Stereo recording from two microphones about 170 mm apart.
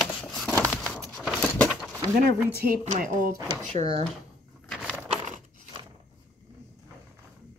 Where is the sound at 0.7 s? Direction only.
10° left (ahead or behind).